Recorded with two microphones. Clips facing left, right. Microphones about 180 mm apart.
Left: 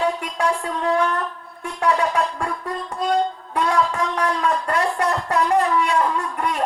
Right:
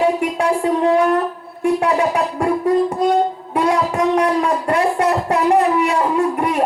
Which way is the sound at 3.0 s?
15° right (ahead or behind).